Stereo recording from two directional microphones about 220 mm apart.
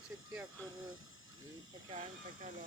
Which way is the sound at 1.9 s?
25° right (ahead or behind).